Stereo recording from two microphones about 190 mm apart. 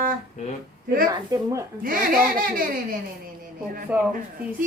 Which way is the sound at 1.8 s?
50° right (ahead or behind).